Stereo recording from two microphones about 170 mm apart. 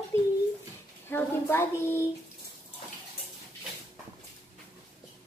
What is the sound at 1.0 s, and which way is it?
Speech, 10° left (ahead or behind).